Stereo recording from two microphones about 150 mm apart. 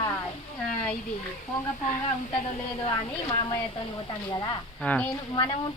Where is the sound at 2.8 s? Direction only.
30° left (ahead or behind).